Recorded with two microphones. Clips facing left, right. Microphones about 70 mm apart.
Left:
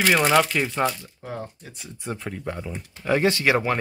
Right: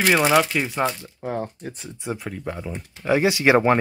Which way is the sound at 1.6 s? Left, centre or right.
Right.